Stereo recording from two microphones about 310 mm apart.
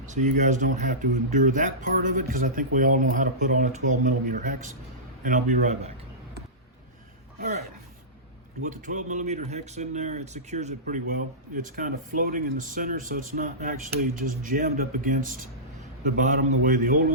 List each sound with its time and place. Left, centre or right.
0.1 s speech: right
7.3 s speech: right
8.6 s speech: right